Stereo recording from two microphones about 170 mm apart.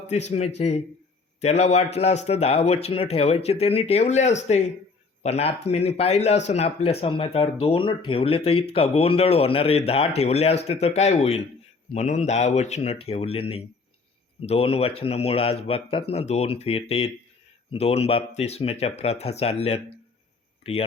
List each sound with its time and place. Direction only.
0.1 s speech: 40° left (ahead or behind)